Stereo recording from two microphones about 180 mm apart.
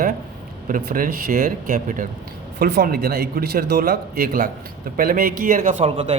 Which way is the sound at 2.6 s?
60° right (ahead or behind).